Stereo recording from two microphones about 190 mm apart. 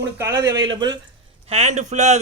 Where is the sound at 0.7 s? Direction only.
20° right (ahead or behind).